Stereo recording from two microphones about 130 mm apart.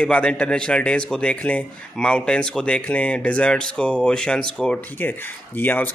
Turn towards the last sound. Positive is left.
turn(degrees=15)  # may be behind; listen again after turning